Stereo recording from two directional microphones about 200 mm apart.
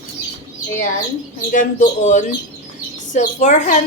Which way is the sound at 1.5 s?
40° left (ahead or behind).